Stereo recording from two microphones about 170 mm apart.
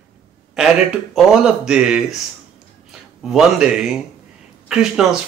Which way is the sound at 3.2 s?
5° right (ahead or behind).